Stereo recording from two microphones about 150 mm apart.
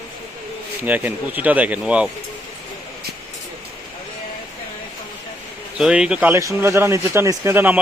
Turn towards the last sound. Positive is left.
turn(degrees=-10)  # may be behind; listen again after turning